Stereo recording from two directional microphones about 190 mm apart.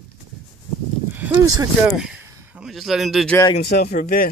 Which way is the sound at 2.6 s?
Centre (ahead or behind).